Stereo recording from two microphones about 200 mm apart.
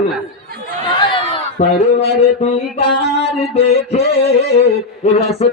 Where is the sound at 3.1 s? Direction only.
60° left (ahead or behind).